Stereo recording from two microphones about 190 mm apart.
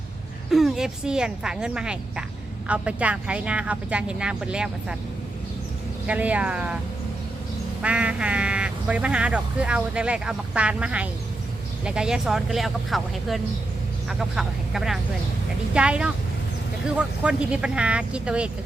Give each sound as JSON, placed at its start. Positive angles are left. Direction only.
{"t": 0.5, "sound": "speech", "side_deg": 0}
{"t": 6.1, "sound": "speech", "side_deg": -5}
{"t": 7.8, "sound": "speech", "side_deg": -5}